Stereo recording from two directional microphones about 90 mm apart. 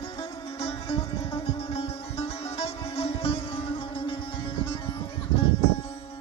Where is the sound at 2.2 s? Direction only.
90° left.